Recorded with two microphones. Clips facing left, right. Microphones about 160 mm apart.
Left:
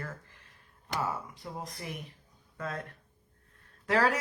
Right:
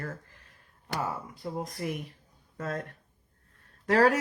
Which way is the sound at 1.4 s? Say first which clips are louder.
Right 7 dB; 40° right (ahead or behind).